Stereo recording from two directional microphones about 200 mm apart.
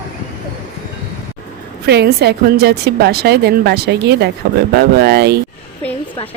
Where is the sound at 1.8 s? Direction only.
55° right (ahead or behind).